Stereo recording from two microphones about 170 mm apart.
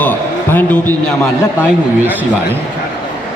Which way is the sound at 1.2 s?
15° left (ahead or behind).